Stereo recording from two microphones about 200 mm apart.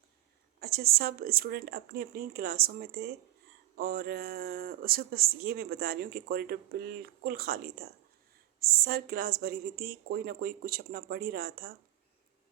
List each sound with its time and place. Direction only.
0.6 s speech: 50° right (ahead or behind)